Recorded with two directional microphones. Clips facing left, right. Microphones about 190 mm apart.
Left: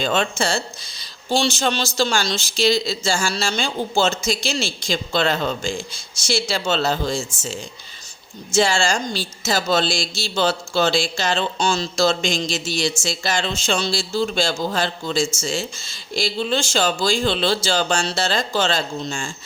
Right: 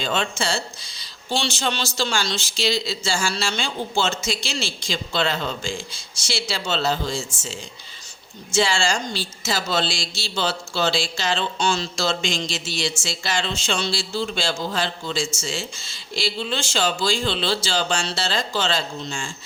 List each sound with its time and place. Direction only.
0.0 s speech: 45° left (ahead or behind)